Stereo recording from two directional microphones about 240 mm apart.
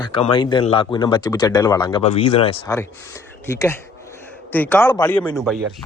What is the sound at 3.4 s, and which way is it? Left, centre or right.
A man's voice, centre.